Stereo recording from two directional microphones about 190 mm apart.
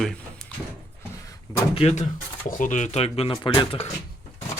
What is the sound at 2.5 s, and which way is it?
Speech, 45° left (ahead or behind).